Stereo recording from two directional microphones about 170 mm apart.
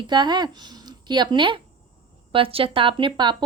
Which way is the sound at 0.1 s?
25° right (ahead or behind).